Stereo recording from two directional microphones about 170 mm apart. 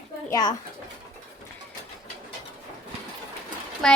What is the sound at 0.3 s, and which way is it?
Speech, 20° left (ahead or behind).